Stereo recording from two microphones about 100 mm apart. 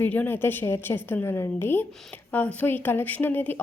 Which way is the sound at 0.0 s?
20° left (ahead or behind).